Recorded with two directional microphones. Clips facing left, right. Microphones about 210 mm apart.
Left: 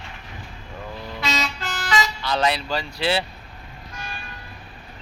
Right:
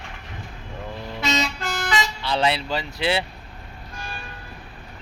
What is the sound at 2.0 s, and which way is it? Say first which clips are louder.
Speech: left 1 dB; 25° right (ahead or behind).